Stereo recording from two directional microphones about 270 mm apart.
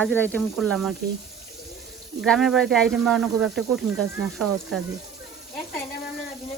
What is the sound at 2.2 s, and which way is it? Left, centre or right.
Speech, centre.